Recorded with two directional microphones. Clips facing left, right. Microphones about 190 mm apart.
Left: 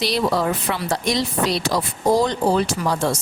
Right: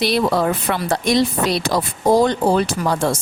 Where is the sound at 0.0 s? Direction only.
55° right (ahead or behind).